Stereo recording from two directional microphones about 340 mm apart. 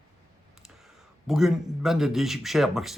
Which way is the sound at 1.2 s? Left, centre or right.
Centre.